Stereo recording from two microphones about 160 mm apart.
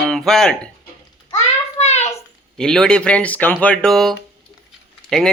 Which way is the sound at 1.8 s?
45° left (ahead or behind).